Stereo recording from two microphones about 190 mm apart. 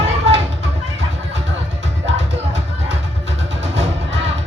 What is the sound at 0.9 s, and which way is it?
Music, 70° right (ahead or behind).